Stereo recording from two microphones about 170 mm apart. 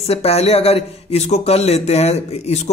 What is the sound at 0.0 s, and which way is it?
A man's voice, 35° left (ahead or behind).